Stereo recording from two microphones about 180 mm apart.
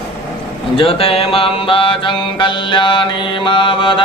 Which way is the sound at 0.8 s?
30° left (ahead or behind).